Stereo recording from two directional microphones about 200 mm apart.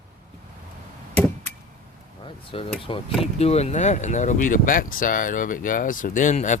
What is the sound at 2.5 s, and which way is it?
Speech, 30° left (ahead or behind).